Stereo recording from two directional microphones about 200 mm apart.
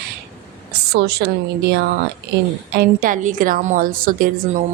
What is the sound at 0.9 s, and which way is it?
Speech, 55° right (ahead or behind).